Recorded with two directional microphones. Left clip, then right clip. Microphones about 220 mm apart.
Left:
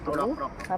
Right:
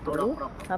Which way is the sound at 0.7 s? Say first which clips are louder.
Even; 5° right (ahead or behind).